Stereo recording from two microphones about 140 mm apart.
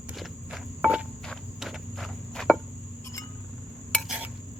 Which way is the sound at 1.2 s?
Centre (ahead or behind).